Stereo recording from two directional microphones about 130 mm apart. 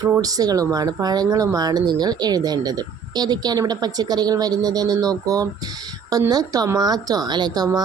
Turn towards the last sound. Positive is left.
turn(degrees=-30)  # may be behind; listen again after turning